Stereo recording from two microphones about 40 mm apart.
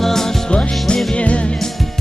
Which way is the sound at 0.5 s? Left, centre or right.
Left.